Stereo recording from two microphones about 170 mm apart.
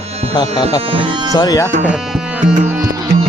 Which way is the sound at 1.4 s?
20° left (ahead or behind).